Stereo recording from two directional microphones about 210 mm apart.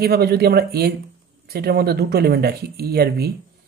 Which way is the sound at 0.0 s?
50° right (ahead or behind).